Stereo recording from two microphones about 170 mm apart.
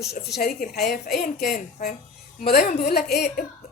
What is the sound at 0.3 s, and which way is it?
A woman's voice, 65° left (ahead or behind).